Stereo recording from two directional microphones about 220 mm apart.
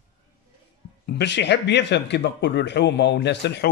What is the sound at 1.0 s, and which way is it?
Speech, 50° left (ahead or behind).